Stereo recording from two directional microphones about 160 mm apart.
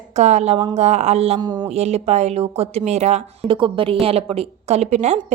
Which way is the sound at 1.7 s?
45° right (ahead or behind).